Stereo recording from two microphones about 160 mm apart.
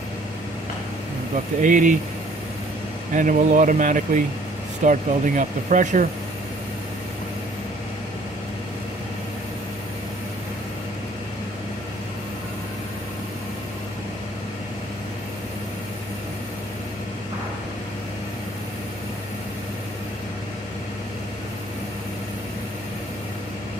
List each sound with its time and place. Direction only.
1.6 s speech: 55° right (ahead or behind)
3.2 s speech: 55° right (ahead or behind)